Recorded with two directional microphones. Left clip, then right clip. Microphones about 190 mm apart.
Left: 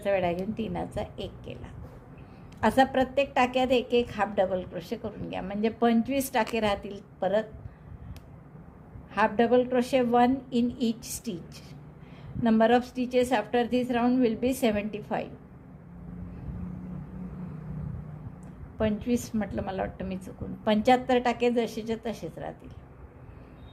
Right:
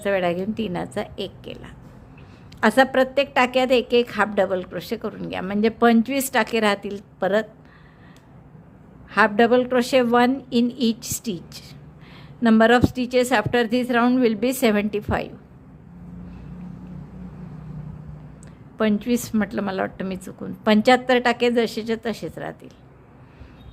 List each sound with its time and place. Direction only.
0.0 s a woman's voice: 25° right (ahead or behind)
9.1 s a woman's voice: 25° right (ahead or behind)
18.8 s a woman's voice: 30° right (ahead or behind)